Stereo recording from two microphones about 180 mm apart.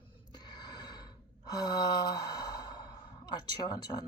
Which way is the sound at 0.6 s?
20° left (ahead or behind).